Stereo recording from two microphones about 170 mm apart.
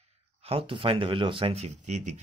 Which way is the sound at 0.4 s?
35° right (ahead or behind).